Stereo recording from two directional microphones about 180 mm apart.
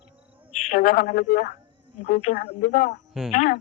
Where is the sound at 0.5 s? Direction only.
40° left (ahead or behind).